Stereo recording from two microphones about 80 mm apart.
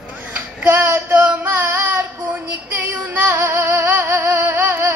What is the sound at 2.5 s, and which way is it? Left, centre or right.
Female singing, right.